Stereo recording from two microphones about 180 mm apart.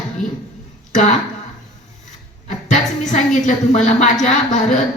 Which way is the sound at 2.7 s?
40° left (ahead or behind).